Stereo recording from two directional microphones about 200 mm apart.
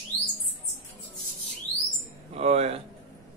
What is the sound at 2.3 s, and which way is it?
Speech, 30° right (ahead or behind).